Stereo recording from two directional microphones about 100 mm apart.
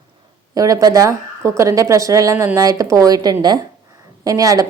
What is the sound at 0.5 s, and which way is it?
Speech, 35° right (ahead or behind).